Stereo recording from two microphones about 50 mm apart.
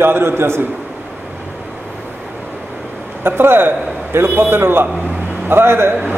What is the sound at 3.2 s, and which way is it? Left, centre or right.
A man's voice, right.